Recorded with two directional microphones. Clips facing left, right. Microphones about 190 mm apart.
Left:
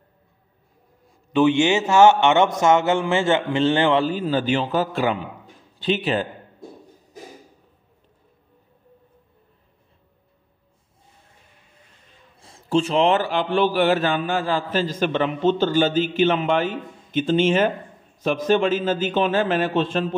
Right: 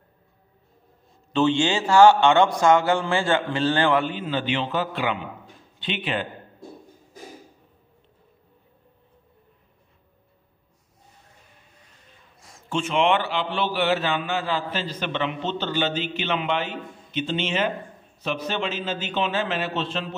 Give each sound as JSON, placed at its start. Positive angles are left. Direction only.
{"t": 1.3, "sound": "a man's voice", "side_deg": 15}
{"t": 4.0, "sound": "a man's voice", "side_deg": 40}
{"t": 12.4, "sound": "a man's voice", "side_deg": 30}